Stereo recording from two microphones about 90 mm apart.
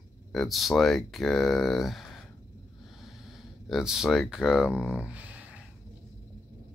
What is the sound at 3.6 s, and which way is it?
Speech, 5° right (ahead or behind).